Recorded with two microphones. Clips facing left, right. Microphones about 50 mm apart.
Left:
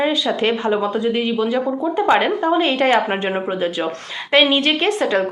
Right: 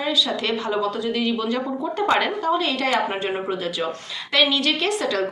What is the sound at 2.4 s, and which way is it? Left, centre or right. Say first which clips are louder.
A woman's voice: left 5 dB; left.